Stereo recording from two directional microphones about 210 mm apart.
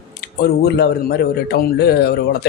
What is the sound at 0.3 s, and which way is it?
Speech, 50° left (ahead or behind).